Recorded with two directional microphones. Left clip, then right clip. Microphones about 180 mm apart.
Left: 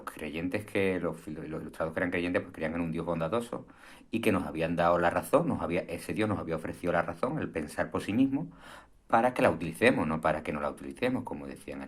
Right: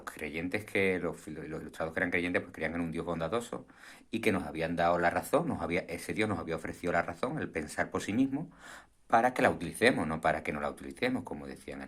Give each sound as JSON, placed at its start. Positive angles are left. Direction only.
{"t": 0.0, "sound": "speech", "side_deg": -30}